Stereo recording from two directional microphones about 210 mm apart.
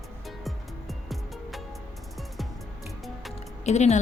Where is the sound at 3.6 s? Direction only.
35° left (ahead or behind).